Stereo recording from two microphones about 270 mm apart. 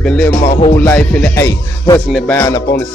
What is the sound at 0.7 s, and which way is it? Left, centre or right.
Speech, centre.